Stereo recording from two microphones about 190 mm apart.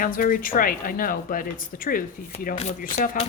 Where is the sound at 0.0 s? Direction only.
45° left (ahead or behind).